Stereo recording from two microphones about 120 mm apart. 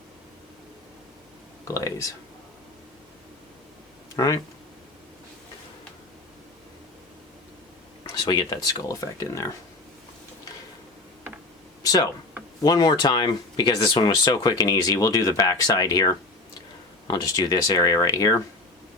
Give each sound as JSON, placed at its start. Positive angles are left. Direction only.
{"t": 1.6, "sound": "speech", "side_deg": 25}
{"t": 4.1, "sound": "speech", "side_deg": 30}
{"t": 8.2, "sound": "speech", "side_deg": 35}
{"t": 11.8, "sound": "a sound", "side_deg": 30}
{"t": 12.6, "sound": "speech", "side_deg": 35}